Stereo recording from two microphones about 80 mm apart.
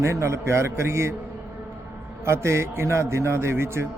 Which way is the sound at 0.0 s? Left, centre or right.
Right.